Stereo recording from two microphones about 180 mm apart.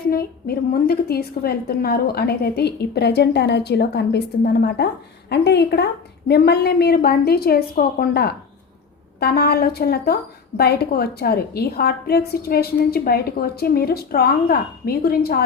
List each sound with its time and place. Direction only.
0.1 s a woman's voice: 60° left (ahead or behind)